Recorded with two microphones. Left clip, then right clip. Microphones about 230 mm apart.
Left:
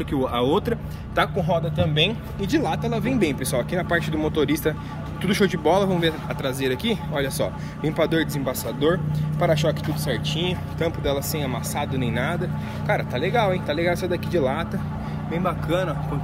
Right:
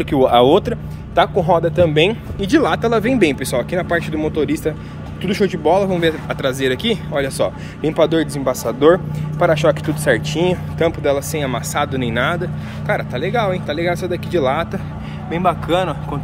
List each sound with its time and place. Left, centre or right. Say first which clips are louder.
0.0 s speech: right 11 dB; centre
10.0 s speech: right 11 dB; centre